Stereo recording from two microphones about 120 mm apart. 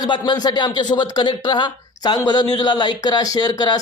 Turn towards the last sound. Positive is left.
turn(degrees=35)  # may be behind; listen again after turning